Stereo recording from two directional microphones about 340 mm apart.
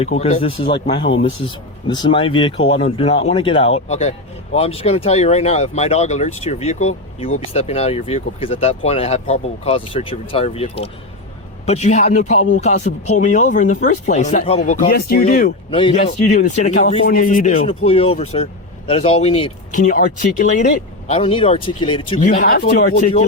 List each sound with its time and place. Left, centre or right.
0.0 s speech: centre
22.3 s speech: left